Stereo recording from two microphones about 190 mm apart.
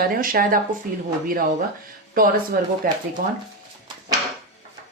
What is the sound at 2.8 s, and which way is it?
Speech, 50° right (ahead or behind).